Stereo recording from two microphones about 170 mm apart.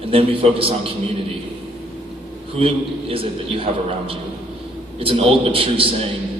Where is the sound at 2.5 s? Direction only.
35° right (ahead or behind).